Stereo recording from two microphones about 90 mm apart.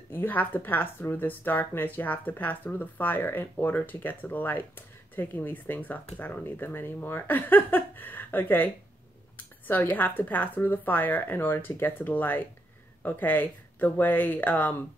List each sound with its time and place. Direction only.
0.1 s speech: 20° left (ahead or behind)